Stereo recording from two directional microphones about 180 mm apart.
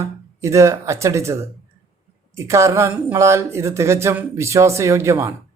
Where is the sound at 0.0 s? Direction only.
15° right (ahead or behind).